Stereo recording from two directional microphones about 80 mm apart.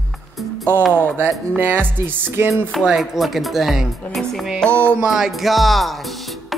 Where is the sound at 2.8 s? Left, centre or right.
Centre.